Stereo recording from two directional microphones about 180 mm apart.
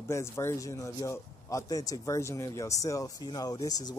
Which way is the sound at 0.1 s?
15° left (ahead or behind).